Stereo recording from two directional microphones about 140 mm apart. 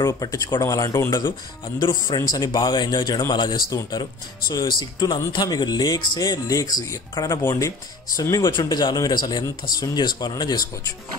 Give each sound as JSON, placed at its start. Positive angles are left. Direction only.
{"t": 0.0, "sound": "speech", "side_deg": 25}